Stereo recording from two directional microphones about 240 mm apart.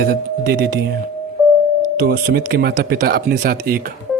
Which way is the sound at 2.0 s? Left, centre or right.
Right.